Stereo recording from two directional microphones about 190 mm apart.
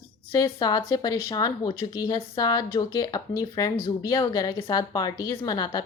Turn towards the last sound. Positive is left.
turn(degrees=20)  # may be behind; listen again after turning